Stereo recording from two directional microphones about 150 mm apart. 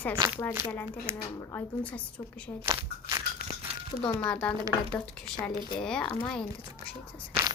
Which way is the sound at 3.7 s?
40° right (ahead or behind).